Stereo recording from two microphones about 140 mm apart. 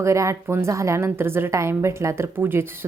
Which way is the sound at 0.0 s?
20° right (ahead or behind).